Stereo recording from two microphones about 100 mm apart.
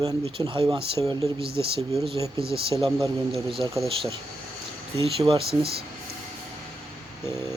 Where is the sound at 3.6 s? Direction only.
50° right (ahead or behind).